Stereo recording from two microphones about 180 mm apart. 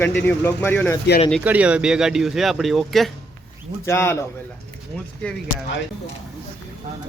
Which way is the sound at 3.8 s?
15° left (ahead or behind).